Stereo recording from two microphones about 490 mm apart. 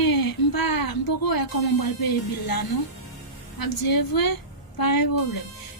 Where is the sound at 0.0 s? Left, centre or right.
Left.